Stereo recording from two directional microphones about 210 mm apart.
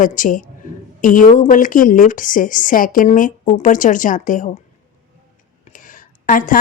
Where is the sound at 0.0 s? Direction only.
40° left (ahead or behind).